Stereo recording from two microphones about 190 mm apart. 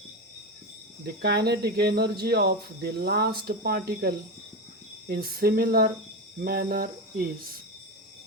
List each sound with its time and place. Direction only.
1.0 s speech: 60° right (ahead or behind)
5.0 s cricket: 55° right (ahead or behind)